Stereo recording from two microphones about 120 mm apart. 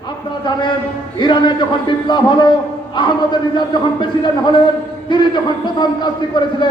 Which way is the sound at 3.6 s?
40° left (ahead or behind).